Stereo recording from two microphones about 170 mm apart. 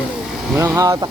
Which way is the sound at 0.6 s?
20° right (ahead or behind).